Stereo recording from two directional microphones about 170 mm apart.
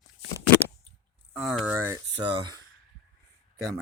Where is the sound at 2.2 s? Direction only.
25° right (ahead or behind).